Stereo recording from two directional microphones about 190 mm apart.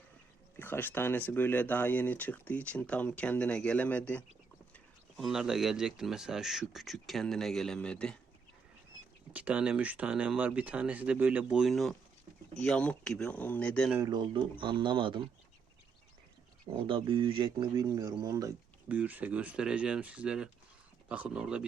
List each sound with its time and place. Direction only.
0.5 s speech: 10° left (ahead or behind)
9.3 s speech: 5° right (ahead or behind)
14.1 s speech: 25° right (ahead or behind)
16.7 s speech: 25° right (ahead or behind)
18.9 s speech: 10° right (ahead or behind)